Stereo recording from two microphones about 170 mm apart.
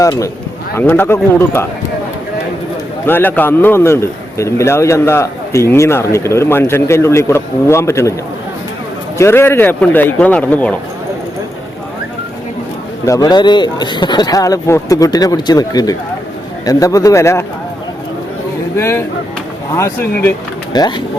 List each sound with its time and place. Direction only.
0.0 s a man's voice: 20° left (ahead or behind)
3.1 s a man's voice: 10° left (ahead or behind)
9.1 s a man's voice: 15° left (ahead or behind)
13.1 s a man's voice: 20° left (ahead or behind)
18.8 s a man's voice: 15° left (ahead or behind)
20.7 s a man's voice: 25° left (ahead or behind)